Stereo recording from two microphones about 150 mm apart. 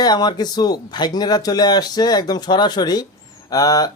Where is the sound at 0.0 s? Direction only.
25° left (ahead or behind).